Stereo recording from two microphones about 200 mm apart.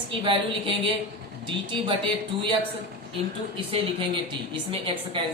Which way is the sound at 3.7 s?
25° right (ahead or behind).